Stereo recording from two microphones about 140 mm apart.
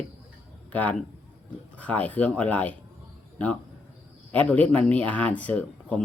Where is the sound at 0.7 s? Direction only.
10° left (ahead or behind).